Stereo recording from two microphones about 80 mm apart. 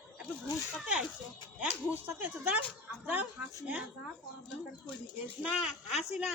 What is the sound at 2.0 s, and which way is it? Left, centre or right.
Speech, right.